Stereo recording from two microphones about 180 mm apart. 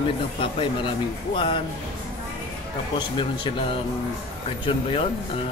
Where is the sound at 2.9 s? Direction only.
25° left (ahead or behind).